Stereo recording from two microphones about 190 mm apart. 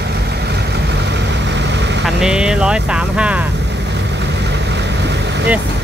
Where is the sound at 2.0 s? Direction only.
5° right (ahead or behind).